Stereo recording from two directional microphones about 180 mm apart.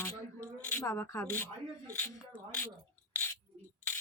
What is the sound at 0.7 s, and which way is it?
Speech, 15° left (ahead or behind).